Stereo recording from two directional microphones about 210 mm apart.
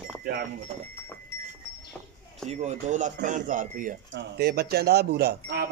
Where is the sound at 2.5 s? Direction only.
35° right (ahead or behind).